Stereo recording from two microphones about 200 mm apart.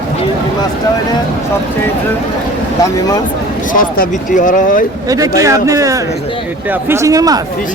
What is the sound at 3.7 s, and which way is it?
Speech, 45° left (ahead or behind).